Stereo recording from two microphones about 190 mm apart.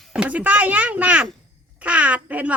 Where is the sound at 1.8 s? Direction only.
5° right (ahead or behind).